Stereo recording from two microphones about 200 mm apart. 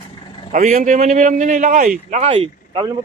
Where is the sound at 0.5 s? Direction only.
40° right (ahead or behind).